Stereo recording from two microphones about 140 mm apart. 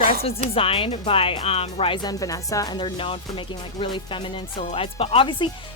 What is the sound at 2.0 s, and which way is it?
Music, 25° left (ahead or behind).